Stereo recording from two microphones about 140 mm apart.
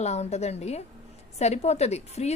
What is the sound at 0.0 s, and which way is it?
A woman's voice, 50° left (ahead or behind).